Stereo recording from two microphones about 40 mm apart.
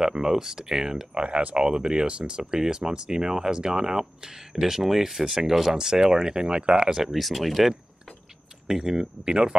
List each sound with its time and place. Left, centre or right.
0.0 s speech: centre
1.1 s speech: right
7.1 s speech: centre
8.6 s speech: centre